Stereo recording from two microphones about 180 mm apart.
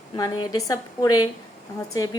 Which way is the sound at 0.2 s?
20° left (ahead or behind).